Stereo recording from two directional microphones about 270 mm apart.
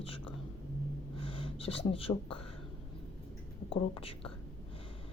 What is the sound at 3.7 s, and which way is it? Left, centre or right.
Speech, centre.